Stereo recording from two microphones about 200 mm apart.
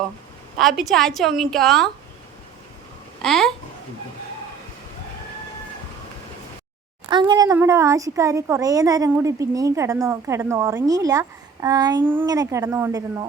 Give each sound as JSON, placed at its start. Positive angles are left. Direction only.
{"t": 0.6, "sound": "a woman's voice", "side_deg": 0}
{"t": 3.2, "sound": "babbling", "side_deg": 0}
{"t": 7.1, "sound": "speech", "side_deg": -20}